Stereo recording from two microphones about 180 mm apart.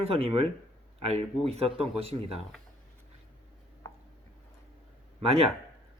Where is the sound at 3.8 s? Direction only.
20° left (ahead or behind).